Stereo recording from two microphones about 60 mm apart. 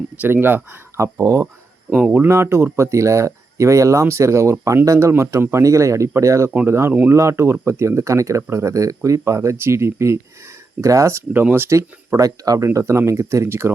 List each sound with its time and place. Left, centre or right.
0.2 s speech: right
1.2 s speech: right
2.0 s speech: right
2.2 s speech: right
11.5 s speech: right
11.8 s speech: right
12.6 s speech: right